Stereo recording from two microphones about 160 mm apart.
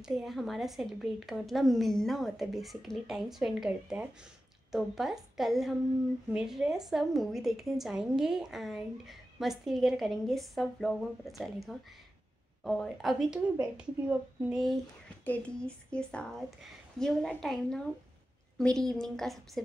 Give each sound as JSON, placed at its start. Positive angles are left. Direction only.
{"t": 0.0, "sound": "a woman's voice", "side_deg": 0}
{"t": 15.2, "sound": "a woman's voice", "side_deg": 10}